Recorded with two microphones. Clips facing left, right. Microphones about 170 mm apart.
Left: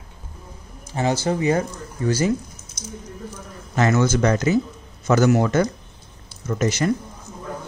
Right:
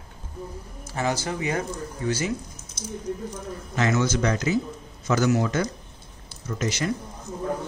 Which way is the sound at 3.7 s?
50° left (ahead or behind).